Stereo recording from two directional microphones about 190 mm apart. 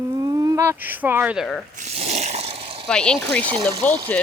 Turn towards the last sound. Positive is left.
turn(degrees=5)  # may be behind; listen again after turning